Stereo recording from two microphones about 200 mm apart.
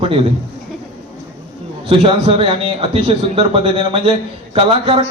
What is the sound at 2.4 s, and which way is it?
A man's voice, 30° right (ahead or behind).